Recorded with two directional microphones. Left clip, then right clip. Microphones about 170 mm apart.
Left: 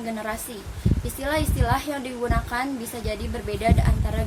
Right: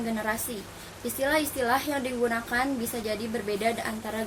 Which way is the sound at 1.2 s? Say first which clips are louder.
Even; 5° left (ahead or behind).